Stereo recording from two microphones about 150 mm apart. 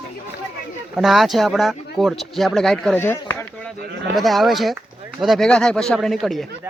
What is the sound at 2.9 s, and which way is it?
Speech, 15° left (ahead or behind).